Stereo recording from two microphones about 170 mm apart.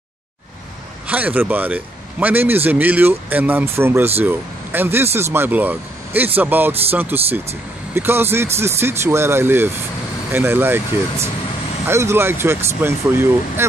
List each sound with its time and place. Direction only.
1.0 s speech: 10° right (ahead or behind)